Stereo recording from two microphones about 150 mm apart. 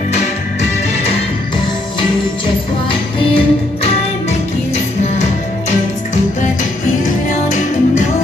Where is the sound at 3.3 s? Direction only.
45° left (ahead or behind).